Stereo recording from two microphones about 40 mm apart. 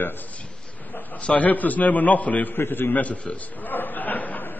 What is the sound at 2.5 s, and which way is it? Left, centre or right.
Speech, left.